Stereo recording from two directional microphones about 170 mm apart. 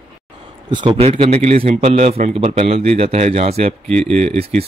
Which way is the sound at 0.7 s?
30° right (ahead or behind).